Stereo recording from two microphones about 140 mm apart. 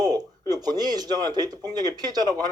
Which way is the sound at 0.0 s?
25° right (ahead or behind).